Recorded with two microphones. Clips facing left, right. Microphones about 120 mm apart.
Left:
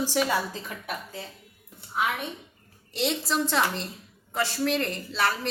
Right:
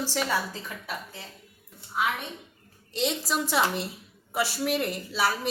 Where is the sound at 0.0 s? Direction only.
10° left (ahead or behind).